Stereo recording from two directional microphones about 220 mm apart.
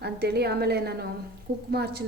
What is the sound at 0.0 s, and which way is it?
A woman's voice, 50° right (ahead or behind).